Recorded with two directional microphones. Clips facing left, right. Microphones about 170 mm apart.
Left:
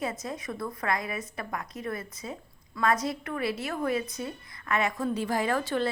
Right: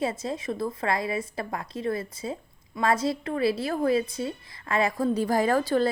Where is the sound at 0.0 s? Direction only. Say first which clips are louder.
Right 5 dB; 30° right (ahead or behind).